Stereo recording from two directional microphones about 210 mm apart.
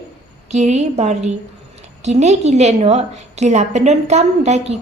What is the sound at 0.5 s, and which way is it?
A woman's voice, 35° right (ahead or behind).